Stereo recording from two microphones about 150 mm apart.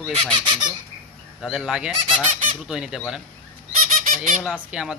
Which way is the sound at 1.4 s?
5° right (ahead or behind).